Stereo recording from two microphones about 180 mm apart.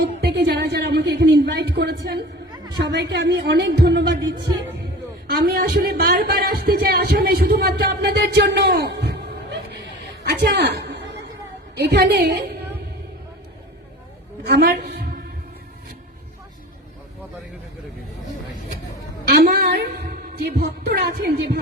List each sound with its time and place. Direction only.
0.2 s a woman's voice: 65° right (ahead or behind)
5.3 s speech: 60° right (ahead or behind)
10.2 s chuckle: 65° right (ahead or behind)
11.8 s a woman's voice: 65° right (ahead or behind)
14.4 s a woman's voice: 65° right (ahead or behind)
19.3 s a woman's voice: 60° right (ahead or behind)